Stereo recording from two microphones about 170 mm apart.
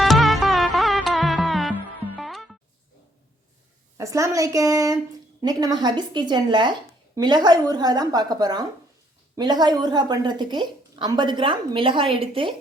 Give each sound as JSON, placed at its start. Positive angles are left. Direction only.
{"t": 0.0, "sound": "music", "side_deg": 0}
{"t": 3.9, "sound": "a woman's voice", "side_deg": -20}